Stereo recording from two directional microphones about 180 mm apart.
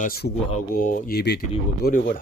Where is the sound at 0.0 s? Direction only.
55° left (ahead or behind).